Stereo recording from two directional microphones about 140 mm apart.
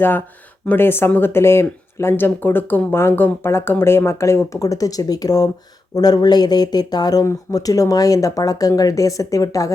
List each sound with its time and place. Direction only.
0.7 s speech: 15° left (ahead or behind)